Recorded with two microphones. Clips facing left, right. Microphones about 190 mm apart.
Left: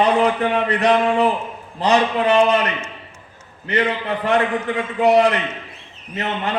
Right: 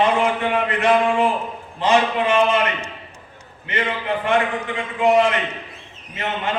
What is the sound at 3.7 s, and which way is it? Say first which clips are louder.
Speech: left 3 dB; 35° left (ahead or behind).